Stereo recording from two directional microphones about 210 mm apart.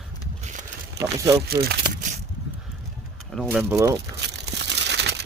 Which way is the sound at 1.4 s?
50° right (ahead or behind).